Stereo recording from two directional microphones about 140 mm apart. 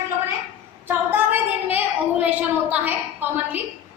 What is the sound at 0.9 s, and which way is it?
A woman's voice, 15° right (ahead or behind).